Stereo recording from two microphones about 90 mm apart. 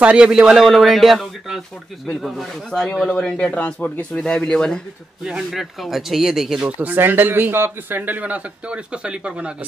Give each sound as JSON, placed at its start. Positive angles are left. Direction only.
{"t": 0.0, "sound": "speech", "side_deg": -10}
{"t": 5.2, "sound": "speech", "side_deg": -5}
{"t": 6.8, "sound": "a man's voice", "side_deg": -20}